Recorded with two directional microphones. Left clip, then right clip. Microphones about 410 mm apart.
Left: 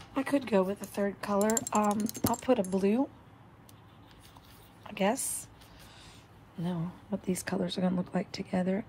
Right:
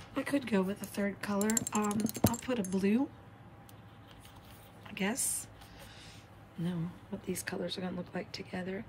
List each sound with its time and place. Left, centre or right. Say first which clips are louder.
0.1 s speech: left 5 dB; centre
2.0 s speech: even; right
2.4 s speech: left 6 dB; centre
4.8 s speech: left 6 dB; centre
7.2 s speech: left 3 dB; centre